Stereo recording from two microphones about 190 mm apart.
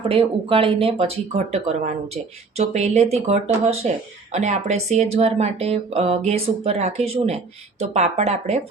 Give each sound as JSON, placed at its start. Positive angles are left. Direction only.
{"t": 0.1, "sound": "speech", "side_deg": -30}